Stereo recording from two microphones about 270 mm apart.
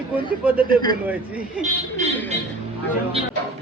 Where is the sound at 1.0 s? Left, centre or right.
Centre.